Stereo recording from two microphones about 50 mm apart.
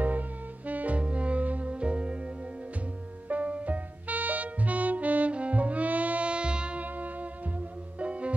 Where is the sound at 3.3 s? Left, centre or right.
Right.